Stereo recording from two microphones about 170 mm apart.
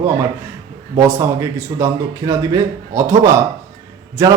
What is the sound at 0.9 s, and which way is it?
A man's voice, 15° right (ahead or behind).